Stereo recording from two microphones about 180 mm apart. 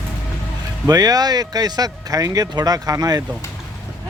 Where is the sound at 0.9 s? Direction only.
20° right (ahead or behind).